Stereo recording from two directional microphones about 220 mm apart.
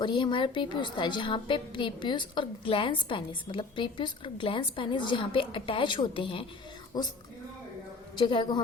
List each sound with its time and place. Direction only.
0.0 s a woman's voice: 20° left (ahead or behind)
8.2 s a woman's voice: 20° left (ahead or behind)